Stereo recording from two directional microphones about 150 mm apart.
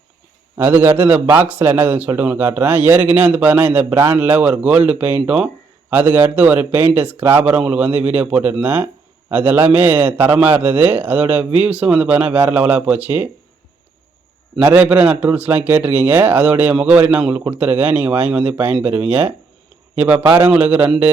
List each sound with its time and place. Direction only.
0.5 s speech: 15° right (ahead or behind)
14.5 s speech: 10° right (ahead or behind)